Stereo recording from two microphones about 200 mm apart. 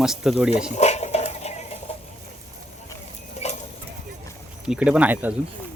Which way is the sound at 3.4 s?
35° left (ahead or behind).